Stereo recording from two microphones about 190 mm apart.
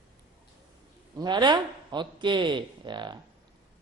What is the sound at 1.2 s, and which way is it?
Speech, 20° right (ahead or behind).